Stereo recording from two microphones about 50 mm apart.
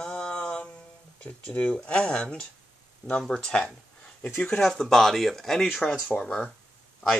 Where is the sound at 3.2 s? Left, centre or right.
Centre.